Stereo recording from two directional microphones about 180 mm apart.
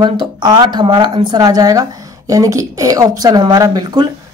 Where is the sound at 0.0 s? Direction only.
25° right (ahead or behind).